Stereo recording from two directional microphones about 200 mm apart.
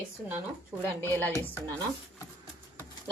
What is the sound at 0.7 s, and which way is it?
Speech, 20° right (ahead or behind).